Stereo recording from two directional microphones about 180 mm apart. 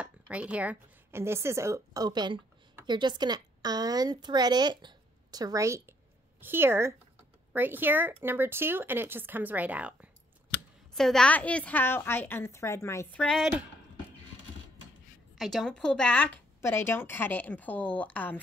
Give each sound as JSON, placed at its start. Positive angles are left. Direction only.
{"t": 0.0, "sound": "a woman's voice", "side_deg": -5}
{"t": 11.0, "sound": "a woman's voice", "side_deg": 5}
{"t": 15.3, "sound": "a woman's voice", "side_deg": 0}